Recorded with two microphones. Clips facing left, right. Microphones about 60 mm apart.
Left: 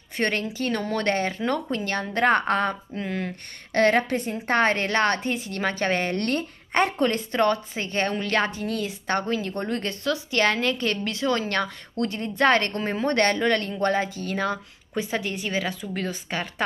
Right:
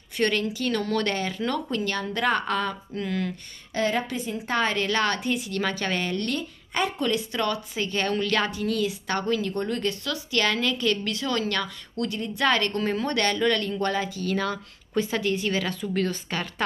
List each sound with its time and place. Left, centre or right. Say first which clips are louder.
0.2 s speech: right 1 dB; left
2.9 s speech: right 1 dB; left
3.7 s speech: left 5 dB; left
6.1 s speech: left 3 dB; left; by 16.6 s centre